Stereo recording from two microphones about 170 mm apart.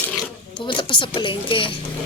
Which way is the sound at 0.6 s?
30° left (ahead or behind).